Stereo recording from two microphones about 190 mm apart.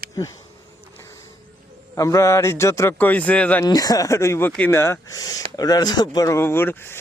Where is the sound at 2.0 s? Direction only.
15° left (ahead or behind).